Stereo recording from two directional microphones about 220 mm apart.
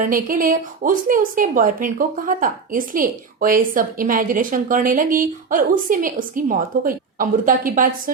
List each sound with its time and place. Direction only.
0.0 s a woman's voice: 40° right (ahead or behind)